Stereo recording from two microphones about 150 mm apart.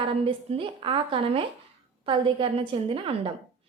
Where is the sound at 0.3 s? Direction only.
35° right (ahead or behind).